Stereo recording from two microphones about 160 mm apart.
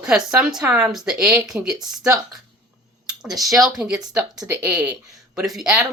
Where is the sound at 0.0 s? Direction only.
5° right (ahead or behind).